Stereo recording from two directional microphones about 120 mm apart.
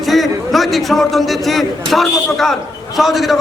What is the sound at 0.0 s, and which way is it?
A man's voice, centre (ahead or behind).